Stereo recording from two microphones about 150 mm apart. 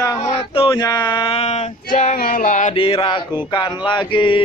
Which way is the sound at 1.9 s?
60° left (ahead or behind).